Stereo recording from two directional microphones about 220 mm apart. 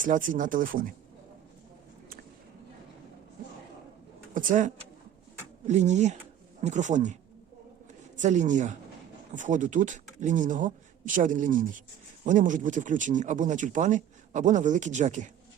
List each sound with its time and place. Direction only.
0.0 s speech: 35° right (ahead or behind)
4.4 s speech: 35° right (ahead or behind)